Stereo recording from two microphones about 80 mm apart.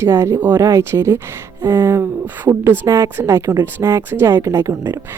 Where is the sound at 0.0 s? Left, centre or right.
Right.